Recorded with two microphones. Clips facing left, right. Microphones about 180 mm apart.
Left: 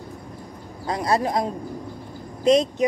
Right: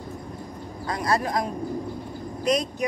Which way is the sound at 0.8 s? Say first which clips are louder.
Left 3 dB; 25° left (ahead or behind).